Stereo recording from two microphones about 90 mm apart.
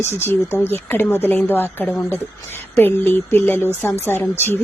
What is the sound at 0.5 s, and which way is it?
A woman's voice, 25° left (ahead or behind).